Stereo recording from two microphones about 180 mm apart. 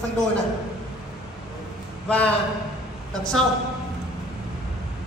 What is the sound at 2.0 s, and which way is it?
Speech, 5° left (ahead or behind).